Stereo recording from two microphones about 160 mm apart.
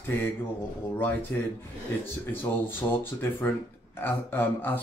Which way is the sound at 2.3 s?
15° left (ahead or behind).